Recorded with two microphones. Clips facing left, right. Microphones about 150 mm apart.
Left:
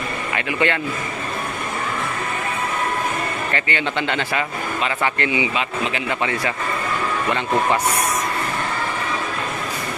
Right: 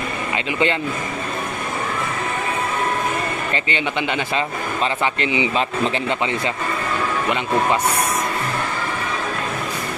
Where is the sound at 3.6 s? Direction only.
20° right (ahead or behind).